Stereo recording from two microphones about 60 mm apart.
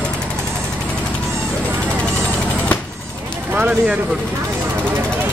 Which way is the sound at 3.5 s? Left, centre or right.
Right.